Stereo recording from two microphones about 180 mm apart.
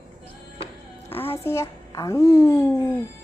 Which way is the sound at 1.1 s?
10° left (ahead or behind).